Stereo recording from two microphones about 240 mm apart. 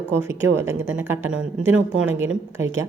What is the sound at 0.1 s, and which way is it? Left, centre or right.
A woman's voice, centre.